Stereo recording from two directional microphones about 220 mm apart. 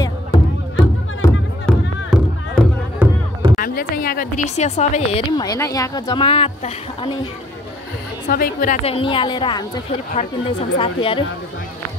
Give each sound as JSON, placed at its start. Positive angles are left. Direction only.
{"t": 0.0, "sound": "music", "side_deg": 20}
{"t": 1.7, "sound": "music", "side_deg": 0}
{"t": 3.5, "sound": "a woman's voice", "side_deg": 40}
{"t": 8.3, "sound": "a woman's voice", "side_deg": 40}
{"t": 8.8, "sound": "a woman's voice", "side_deg": 25}
{"t": 10.8, "sound": "a woman's voice", "side_deg": 25}